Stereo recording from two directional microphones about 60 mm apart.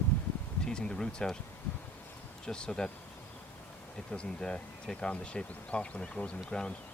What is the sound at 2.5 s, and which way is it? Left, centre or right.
Speech, centre.